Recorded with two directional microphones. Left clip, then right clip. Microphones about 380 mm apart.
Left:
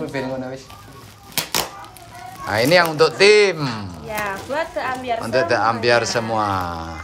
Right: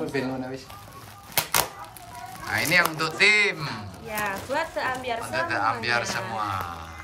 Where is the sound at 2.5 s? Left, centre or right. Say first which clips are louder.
Left 7 dB; centre.